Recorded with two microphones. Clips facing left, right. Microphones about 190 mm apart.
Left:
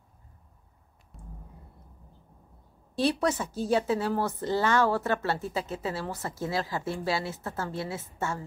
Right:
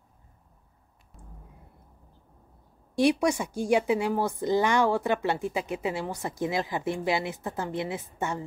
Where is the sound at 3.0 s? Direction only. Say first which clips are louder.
Right 3 dB; 15° right (ahead or behind).